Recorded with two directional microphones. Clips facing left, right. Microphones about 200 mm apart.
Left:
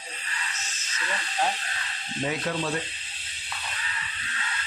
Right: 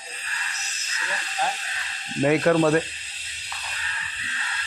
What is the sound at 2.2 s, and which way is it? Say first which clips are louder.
Speech: right 11 dB; 70° right (ahead or behind).